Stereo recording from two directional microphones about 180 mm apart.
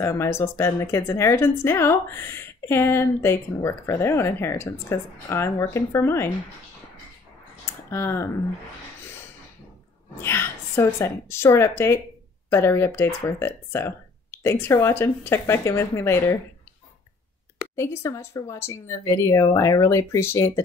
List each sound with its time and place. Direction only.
0.0 s a woman's voice: 15° left (ahead or behind)
7.9 s a woman's voice: 15° left (ahead or behind)
10.2 s a woman's voice: 15° left (ahead or behind)
17.7 s a woman's voice: 15° left (ahead or behind)